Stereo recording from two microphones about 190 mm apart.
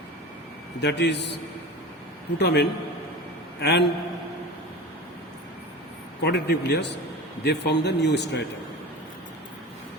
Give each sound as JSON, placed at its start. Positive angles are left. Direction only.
{"t": 0.8, "sound": "speech", "side_deg": 65}
{"t": 2.4, "sound": "speech", "side_deg": 60}
{"t": 6.2, "sound": "speech", "side_deg": 60}